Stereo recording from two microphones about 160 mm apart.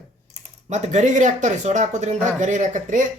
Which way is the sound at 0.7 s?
45° right (ahead or behind).